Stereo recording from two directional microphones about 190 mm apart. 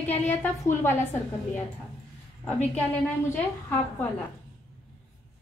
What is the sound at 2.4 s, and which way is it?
Speech, 10° left (ahead or behind).